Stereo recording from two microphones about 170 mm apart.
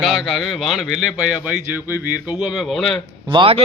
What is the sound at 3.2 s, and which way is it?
Speech, 30° right (ahead or behind).